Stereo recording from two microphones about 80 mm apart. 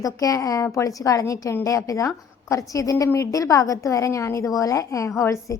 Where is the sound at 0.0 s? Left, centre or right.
Left.